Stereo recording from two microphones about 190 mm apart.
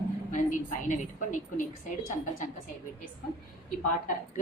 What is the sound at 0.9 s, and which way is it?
Speech, 40° left (ahead or behind).